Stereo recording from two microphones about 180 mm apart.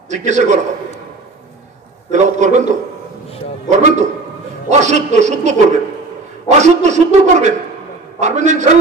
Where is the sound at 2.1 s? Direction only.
40° right (ahead or behind).